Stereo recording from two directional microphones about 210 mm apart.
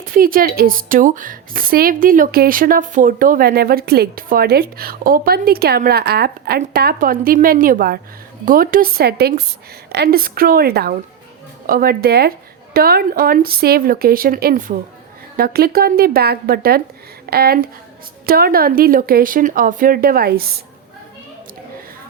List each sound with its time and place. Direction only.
0.1 s speech: 40° right (ahead or behind)